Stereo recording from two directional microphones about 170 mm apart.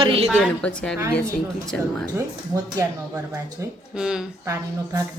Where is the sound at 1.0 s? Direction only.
15° right (ahead or behind).